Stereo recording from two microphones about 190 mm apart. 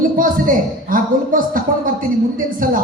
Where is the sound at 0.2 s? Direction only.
45° right (ahead or behind).